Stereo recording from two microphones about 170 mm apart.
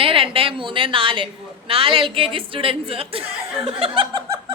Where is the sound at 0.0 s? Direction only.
30° right (ahead or behind).